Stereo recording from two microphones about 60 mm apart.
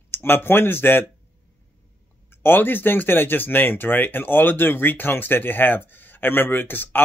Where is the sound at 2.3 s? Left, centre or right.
Left.